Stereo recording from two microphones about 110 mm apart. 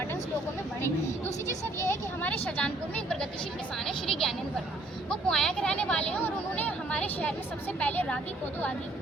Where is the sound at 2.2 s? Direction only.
10° left (ahead or behind).